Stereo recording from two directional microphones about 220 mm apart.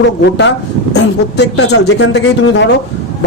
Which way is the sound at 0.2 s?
50° left (ahead or behind).